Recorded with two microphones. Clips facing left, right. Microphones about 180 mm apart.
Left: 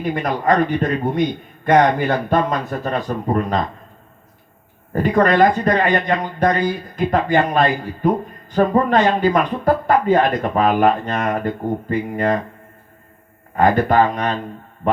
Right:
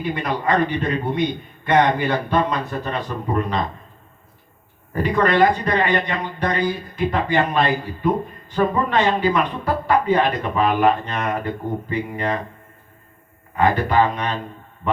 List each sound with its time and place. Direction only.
0.0 s speech: 45° left (ahead or behind)
5.0 s speech: 45° left (ahead or behind)
13.6 s speech: 45° left (ahead or behind)